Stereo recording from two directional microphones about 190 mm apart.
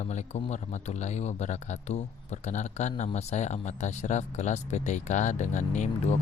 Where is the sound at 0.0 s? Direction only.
40° left (ahead or behind).